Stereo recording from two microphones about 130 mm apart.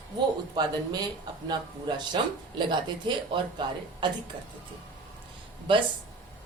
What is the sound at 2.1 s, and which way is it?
Speech, 35° right (ahead or behind).